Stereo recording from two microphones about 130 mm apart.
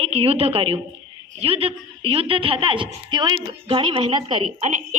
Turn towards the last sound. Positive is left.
turn(degrees=-65)  # may be behind; listen again after turning